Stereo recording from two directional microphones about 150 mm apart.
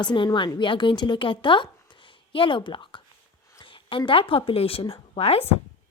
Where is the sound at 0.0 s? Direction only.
30° left (ahead or behind).